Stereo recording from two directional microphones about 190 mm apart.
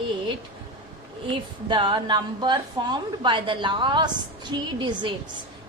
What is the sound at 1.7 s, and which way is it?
A woman's voice, 25° right (ahead or behind).